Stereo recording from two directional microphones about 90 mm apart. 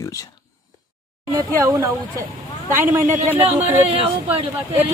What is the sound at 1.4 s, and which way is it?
Speech, 35° right (ahead or behind).